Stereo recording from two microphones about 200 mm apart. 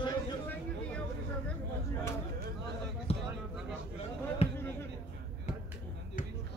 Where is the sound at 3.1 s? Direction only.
30° left (ahead or behind).